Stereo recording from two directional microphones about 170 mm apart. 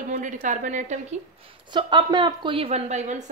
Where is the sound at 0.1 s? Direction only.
50° right (ahead or behind).